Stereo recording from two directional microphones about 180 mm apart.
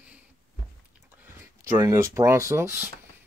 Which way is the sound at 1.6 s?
15° right (ahead or behind).